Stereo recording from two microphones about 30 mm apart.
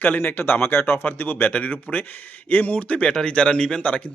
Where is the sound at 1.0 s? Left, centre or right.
Left.